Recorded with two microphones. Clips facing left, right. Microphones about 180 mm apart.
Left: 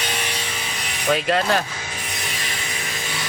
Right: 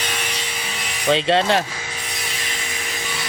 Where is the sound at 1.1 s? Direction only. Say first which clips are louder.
Right 3 dB; 30° right (ahead or behind).